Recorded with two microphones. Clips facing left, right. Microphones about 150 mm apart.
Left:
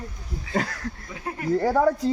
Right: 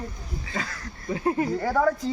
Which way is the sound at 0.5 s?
60° left (ahead or behind).